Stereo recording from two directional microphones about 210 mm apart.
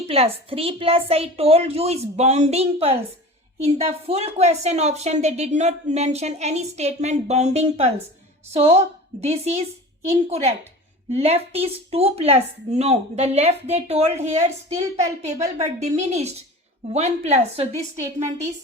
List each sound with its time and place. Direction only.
0.1 s a woman's voice: 30° right (ahead or behind)